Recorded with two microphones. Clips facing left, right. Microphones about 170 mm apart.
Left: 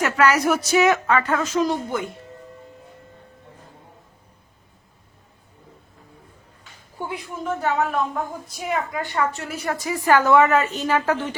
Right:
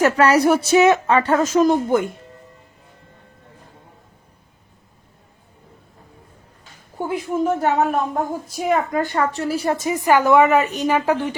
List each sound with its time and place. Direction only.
0.0 s speech: 30° right (ahead or behind); by 2.0 s 50° right (ahead or behind)
7.0 s a woman's voice: 45° right (ahead or behind); by 11.3 s 15° right (ahead or behind)